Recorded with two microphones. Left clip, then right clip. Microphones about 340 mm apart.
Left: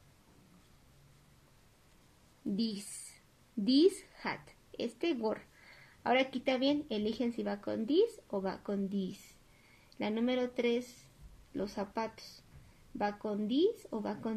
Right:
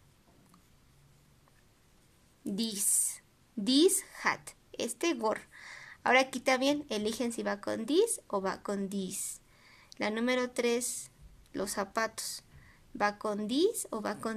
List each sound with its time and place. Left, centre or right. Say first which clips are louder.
2.5 s speech: right 5 dB; right
4.2 s a sound: right 10 dB; right
4.9 s speech: right 4 dB; right